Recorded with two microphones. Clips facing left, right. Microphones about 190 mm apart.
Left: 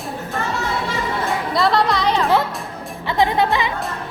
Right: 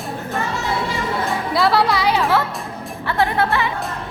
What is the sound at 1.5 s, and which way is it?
Music, 5° right (ahead or behind).